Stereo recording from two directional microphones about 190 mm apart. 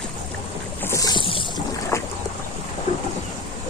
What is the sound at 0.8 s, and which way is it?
Boat, 15° left (ahead or behind).